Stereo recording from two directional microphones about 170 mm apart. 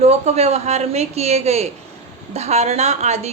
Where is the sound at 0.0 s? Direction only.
40° right (ahead or behind).